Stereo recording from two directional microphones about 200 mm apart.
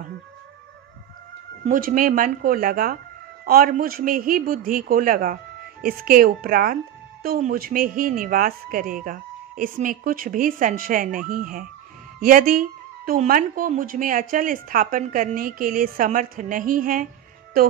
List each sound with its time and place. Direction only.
1.7 s a woman's voice: 45° right (ahead or behind)